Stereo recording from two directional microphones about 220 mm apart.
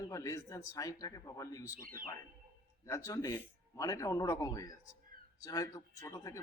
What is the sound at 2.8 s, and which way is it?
Speech, 15° left (ahead or behind).